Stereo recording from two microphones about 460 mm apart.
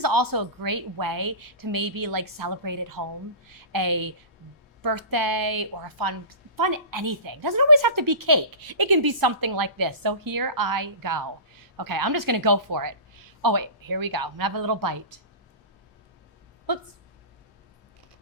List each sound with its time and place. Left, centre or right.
0.0 s a woman's voice: right